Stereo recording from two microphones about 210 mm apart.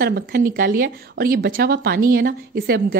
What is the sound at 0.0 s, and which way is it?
Speech, 45° right (ahead or behind).